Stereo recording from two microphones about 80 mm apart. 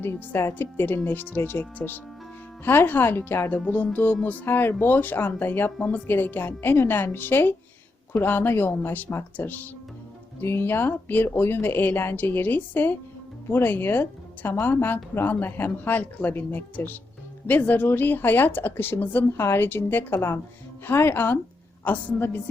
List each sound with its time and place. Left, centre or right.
0.0 s a woman's voice: left